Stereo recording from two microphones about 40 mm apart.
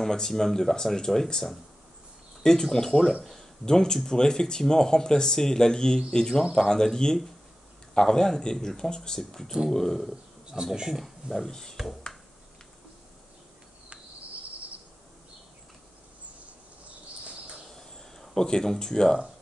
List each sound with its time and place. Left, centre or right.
0.0 s speech: centre
9.2 s speech: centre
10.5 s speech: centre
11.2 s speech: centre
17.2 s a sound: centre
17.6 s a sound: centre